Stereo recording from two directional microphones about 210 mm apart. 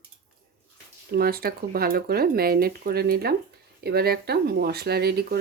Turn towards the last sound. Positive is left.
turn(degrees=-50)  # may be behind; listen again after turning